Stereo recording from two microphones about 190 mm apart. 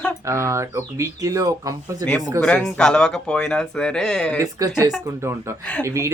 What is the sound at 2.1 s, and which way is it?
Speech, 5° left (ahead or behind).